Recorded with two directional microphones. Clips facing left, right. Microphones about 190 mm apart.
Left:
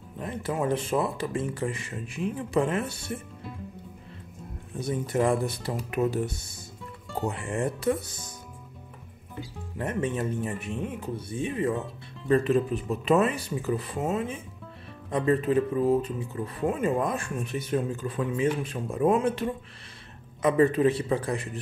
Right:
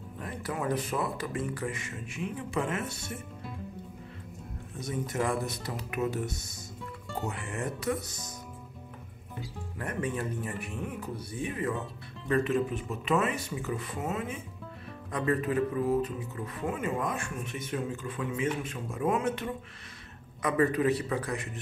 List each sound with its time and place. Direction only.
0.2 s speech: 25° left (ahead or behind)
4.7 s speech: 30° left (ahead or behind)
9.8 s speech: 25° left (ahead or behind)